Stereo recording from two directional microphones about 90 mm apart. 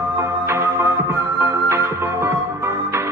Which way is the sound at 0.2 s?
30° right (ahead or behind).